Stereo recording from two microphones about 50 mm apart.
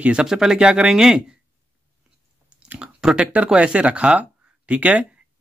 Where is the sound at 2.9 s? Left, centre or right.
Centre.